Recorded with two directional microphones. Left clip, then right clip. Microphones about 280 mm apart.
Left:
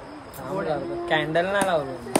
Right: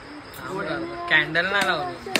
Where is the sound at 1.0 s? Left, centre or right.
Left.